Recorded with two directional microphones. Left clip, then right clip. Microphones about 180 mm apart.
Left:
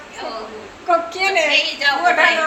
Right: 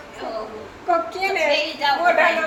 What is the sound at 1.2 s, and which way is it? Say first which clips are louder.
Speech: left 4 dB; 20° left (ahead or behind).